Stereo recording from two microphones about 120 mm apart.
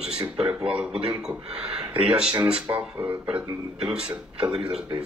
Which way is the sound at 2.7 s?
30° right (ahead or behind).